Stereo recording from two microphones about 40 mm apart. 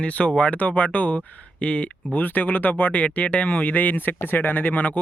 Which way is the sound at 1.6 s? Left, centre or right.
Left.